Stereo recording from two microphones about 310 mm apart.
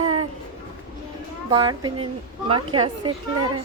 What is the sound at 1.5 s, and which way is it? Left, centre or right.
Speech, centre.